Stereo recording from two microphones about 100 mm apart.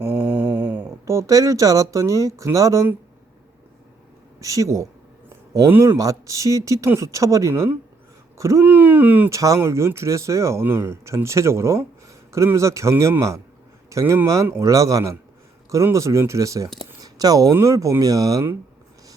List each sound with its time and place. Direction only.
0.2 s speech: 15° right (ahead or behind); by 2.8 s 35° right (ahead or behind)
4.4 s speech: 35° right (ahead or behind)
5.6 s speech: 25° right (ahead or behind)
6.0 s speech: 35° right (ahead or behind)
8.6 s speech: 20° right (ahead or behind)
9.3 s speech: 30° right (ahead or behind)
17.0 s a sound: 40° right (ahead or behind)
17.5 s speech: 30° right (ahead or behind)